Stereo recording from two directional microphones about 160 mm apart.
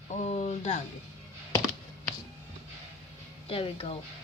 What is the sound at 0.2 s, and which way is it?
Speech, 45° left (ahead or behind).